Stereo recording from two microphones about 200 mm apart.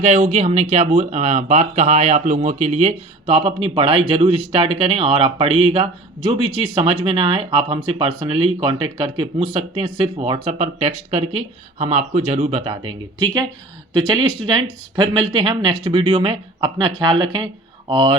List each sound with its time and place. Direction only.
0.0 s speech: 35° right (ahead or behind)
14.4 s speech: 20° right (ahead or behind)